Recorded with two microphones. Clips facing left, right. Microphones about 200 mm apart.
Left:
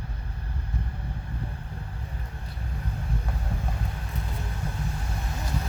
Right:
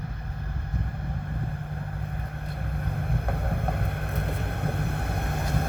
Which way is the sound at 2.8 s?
55° right (ahead or behind).